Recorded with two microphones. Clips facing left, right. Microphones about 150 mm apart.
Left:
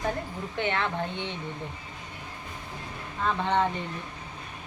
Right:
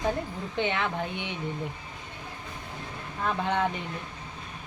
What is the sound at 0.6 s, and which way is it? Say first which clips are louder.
Speech: even; 15° right (ahead or behind).